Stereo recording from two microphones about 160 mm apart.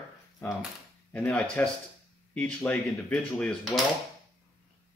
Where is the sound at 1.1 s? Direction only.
5° left (ahead or behind).